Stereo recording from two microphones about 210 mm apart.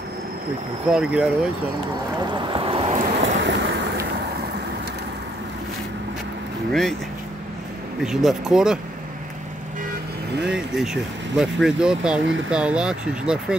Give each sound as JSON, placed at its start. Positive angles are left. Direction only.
{"t": 0.9, "sound": "speech", "side_deg": -5}
{"t": 2.5, "sound": "boat", "side_deg": -25}
{"t": 3.4, "sound": "a sound", "side_deg": -50}
{"t": 6.7, "sound": "speech", "side_deg": 0}
{"t": 8.0, "sound": "speech", "side_deg": 0}
{"t": 10.4, "sound": "speech", "side_deg": -5}